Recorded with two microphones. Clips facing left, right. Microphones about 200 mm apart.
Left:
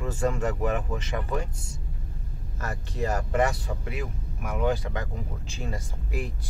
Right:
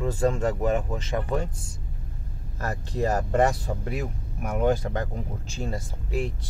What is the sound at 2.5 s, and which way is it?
Speech, 35° right (ahead or behind).